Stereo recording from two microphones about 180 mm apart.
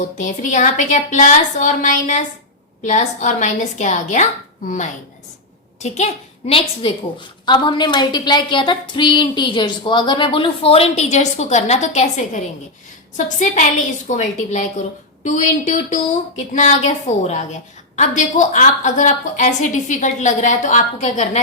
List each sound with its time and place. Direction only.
0.2 s a woman's voice: 45° left (ahead or behind)